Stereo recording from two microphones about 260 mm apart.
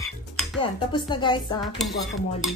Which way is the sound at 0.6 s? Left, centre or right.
Centre.